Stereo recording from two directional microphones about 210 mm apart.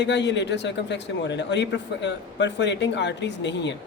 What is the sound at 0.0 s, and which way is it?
A man's voice, 55° left (ahead or behind).